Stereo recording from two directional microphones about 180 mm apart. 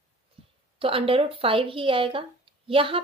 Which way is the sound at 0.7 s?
30° right (ahead or behind).